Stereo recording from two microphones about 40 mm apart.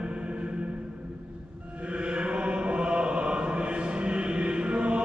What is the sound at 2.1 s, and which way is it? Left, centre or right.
Chant, right.